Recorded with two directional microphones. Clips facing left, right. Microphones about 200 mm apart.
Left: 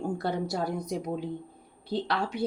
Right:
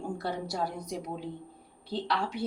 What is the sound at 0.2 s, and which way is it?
Speech, 50° left (ahead or behind).